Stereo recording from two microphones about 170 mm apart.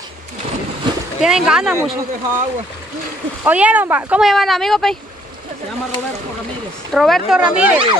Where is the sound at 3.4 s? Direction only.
10° right (ahead or behind).